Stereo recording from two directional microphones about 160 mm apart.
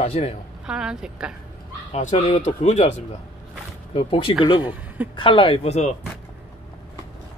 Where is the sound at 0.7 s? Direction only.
5° right (ahead or behind).